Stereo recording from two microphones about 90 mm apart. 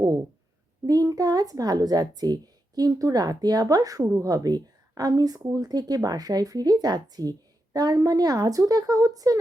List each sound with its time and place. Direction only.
0.9 s a child's voice: 40° right (ahead or behind)